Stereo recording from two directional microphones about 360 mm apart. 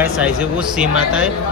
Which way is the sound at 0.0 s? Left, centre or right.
Centre.